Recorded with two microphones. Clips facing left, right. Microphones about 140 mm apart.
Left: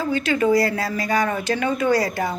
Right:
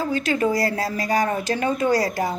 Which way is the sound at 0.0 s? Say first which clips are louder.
Left 1 dB; 40° right (ahead or behind).